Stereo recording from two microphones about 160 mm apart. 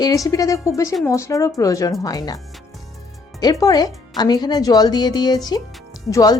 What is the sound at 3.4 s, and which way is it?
A woman's voice, 20° left (ahead or behind).